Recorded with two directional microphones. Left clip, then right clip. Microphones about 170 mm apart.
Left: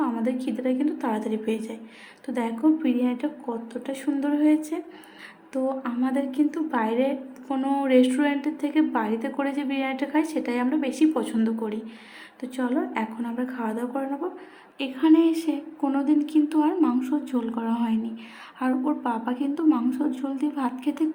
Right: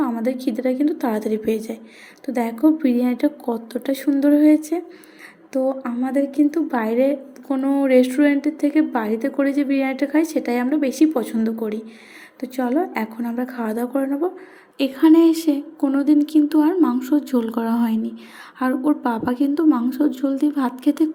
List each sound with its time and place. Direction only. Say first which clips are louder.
0.0 s a woman's voice: right 4 dB; 25° right (ahead or behind)
7.4 s a woman's voice: right 5 dB; 10° right (ahead or behind)